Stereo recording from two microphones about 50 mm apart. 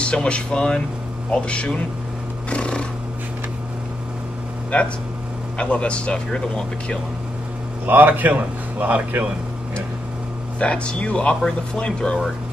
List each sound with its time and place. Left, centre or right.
0.0 s speech: left
2.5 s neigh: left
5.6 s speech: left
7.8 s a man's voice: right
10.6 s speech: left